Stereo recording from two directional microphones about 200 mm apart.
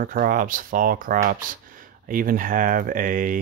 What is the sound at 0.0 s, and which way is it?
Speech, 45° right (ahead or behind).